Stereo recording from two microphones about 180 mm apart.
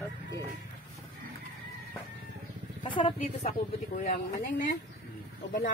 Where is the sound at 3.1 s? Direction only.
40° left (ahead or behind).